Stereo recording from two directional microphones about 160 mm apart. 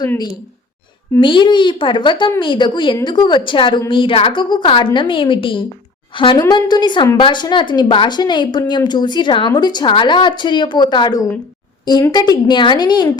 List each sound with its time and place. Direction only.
1.2 s a woman's voice: 30° left (ahead or behind)